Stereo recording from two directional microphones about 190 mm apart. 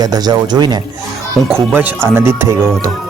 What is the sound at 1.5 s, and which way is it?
Speech, 10° right (ahead or behind).